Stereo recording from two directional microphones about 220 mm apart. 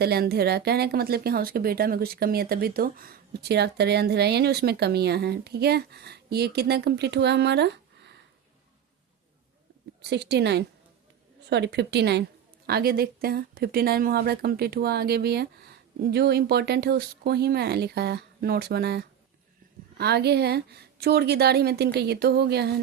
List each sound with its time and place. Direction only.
0.0 s speech: 45° right (ahead or behind)
10.0 s speech: 50° right (ahead or behind)